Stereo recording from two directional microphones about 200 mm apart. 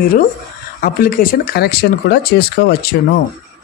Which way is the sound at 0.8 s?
45° left (ahead or behind).